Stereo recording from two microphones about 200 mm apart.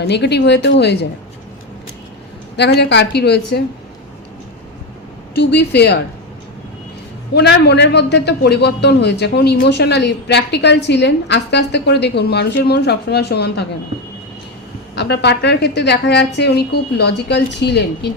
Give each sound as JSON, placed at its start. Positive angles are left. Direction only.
{"t": 0.0, "sound": "a man's voice", "side_deg": 55}
{"t": 2.6, "sound": "a man's voice", "side_deg": 55}
{"t": 5.3, "sound": "a man's voice", "side_deg": 60}
{"t": 7.3, "sound": "a man's voice", "side_deg": 55}
{"t": 14.9, "sound": "a man's voice", "side_deg": 55}